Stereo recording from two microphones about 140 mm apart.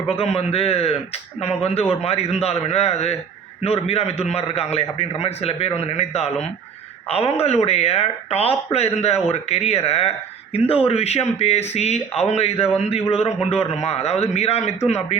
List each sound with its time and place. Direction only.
0.1 s speech: 45° left (ahead or behind)